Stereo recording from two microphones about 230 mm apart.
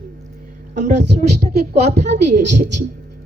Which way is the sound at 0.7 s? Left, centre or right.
Right.